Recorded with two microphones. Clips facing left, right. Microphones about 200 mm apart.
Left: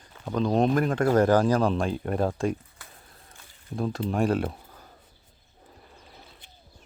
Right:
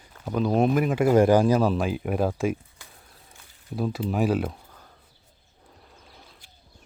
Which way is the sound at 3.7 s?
5° right (ahead or behind).